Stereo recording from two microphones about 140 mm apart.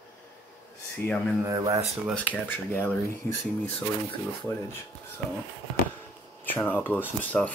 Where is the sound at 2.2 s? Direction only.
10° left (ahead or behind).